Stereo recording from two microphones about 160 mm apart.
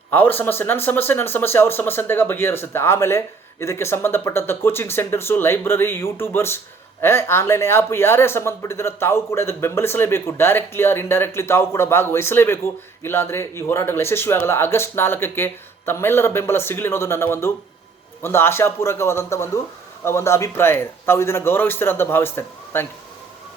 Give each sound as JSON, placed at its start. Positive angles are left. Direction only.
{"t": 0.1, "sound": "speech", "side_deg": 15}